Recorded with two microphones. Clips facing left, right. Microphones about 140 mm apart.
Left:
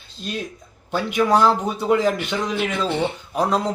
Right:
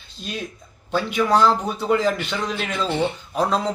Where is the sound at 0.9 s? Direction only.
10° left (ahead or behind).